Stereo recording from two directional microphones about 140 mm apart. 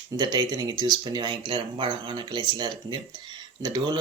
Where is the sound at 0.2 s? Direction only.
30° right (ahead or behind).